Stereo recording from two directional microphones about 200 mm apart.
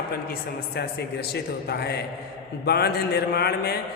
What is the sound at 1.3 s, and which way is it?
A man's voice, 55° left (ahead or behind).